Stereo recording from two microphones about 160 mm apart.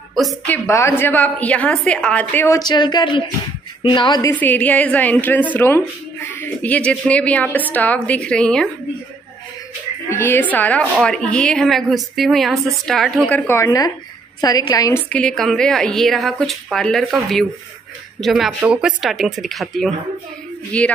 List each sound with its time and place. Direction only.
0.1 s a woman's voice: centre (ahead or behind)
0.7 s a woman's voice: 15° left (ahead or behind)
4.3 s a woman's voice: 10° left (ahead or behind)
10.0 s a woman's voice: 15° left (ahead or behind)
13.7 s a woman's voice: 25° left (ahead or behind)
15.0 s a woman's voice: 5° left (ahead or behind)